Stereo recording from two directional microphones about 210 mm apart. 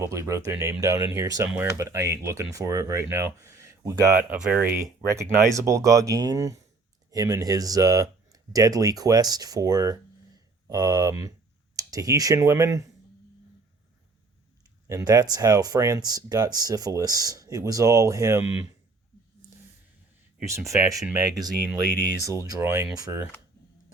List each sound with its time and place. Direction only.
0.0 s speech: 15° right (ahead or behind)
14.8 s speech: 15° right (ahead or behind)
20.4 s speech: 15° right (ahead or behind)